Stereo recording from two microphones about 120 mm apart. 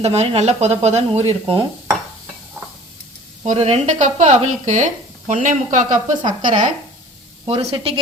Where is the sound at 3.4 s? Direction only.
65° right (ahead or behind); by 6.0 s 90° right.